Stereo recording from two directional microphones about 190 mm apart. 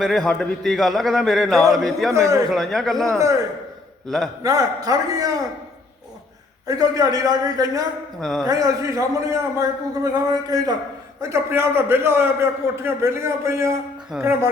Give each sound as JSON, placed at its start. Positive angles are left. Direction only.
{"t": 0.0, "sound": "a man's voice", "side_deg": 5}
{"t": 2.1, "sound": "a man's voice", "side_deg": -15}
{"t": 2.5, "sound": "a man's voice", "side_deg": 0}
{"t": 4.4, "sound": "a man's voice", "side_deg": -20}
{"t": 6.7, "sound": "a man's voice", "side_deg": -20}
{"t": 8.2, "sound": "a man's voice", "side_deg": 0}
{"t": 8.4, "sound": "a man's voice", "side_deg": -20}
{"t": 11.2, "sound": "a man's voice", "side_deg": -15}